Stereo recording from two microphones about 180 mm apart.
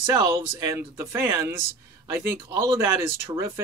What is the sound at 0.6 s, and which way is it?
Speech, 15° right (ahead or behind).